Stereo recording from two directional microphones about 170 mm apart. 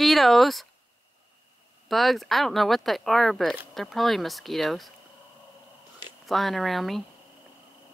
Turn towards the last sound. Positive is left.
turn(degrees=0)  # may be behind; listen again after turning